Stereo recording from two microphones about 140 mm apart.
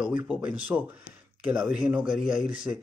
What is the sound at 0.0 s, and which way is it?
Speech, 5° right (ahead or behind).